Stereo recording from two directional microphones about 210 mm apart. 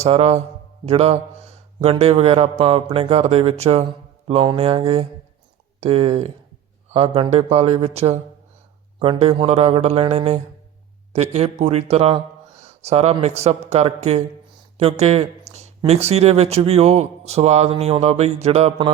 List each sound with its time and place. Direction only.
0.0 s a man's voice: 30° right (ahead or behind)